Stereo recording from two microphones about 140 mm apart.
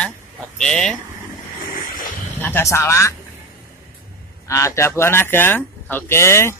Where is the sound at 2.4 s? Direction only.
20° left (ahead or behind).